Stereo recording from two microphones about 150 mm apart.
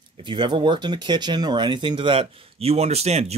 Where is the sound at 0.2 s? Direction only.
35° right (ahead or behind).